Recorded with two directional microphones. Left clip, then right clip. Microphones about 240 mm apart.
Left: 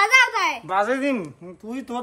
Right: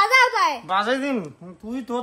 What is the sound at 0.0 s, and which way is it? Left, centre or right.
Babbling, right.